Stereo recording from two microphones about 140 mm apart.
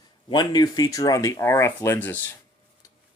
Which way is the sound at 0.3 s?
30° left (ahead or behind).